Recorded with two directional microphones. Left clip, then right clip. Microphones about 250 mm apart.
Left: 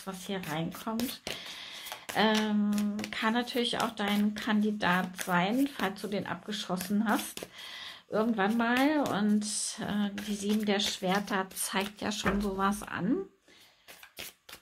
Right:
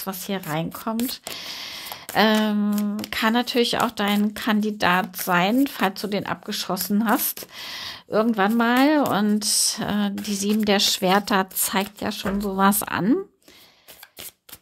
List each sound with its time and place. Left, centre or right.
0.0 s speech: right